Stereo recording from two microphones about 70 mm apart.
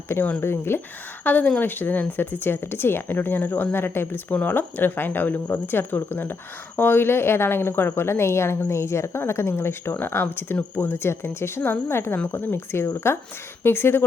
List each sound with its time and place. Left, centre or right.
0.4 s a woman's voice: left
1.2 s a woman's voice: left